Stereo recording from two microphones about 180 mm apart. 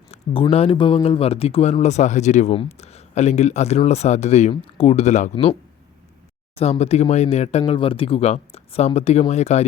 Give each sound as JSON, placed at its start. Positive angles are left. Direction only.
{"t": 0.1, "sound": "speech", "side_deg": 30}
{"t": 6.6, "sound": "speech", "side_deg": 35}